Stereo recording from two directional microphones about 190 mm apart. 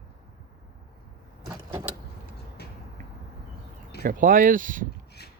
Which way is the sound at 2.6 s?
60° left (ahead or behind).